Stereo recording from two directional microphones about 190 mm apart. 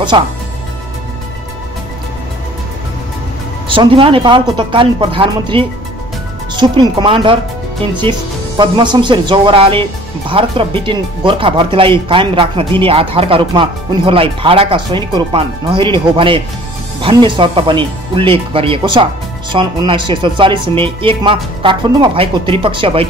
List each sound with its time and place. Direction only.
3.6 s speech: 25° right (ahead or behind)